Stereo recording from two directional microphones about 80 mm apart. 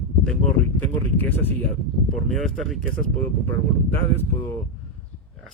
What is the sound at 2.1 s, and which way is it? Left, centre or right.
Speech, centre.